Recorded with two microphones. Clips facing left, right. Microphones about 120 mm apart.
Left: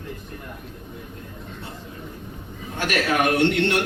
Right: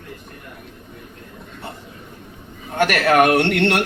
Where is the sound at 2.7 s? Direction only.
60° right (ahead or behind).